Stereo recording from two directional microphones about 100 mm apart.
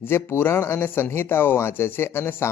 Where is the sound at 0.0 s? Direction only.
20° left (ahead or behind).